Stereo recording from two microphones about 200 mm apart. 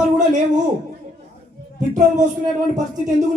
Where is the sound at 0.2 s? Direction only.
40° right (ahead or behind).